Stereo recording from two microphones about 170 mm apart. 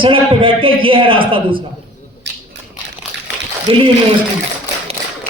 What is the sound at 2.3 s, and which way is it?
Crushing, 90° right.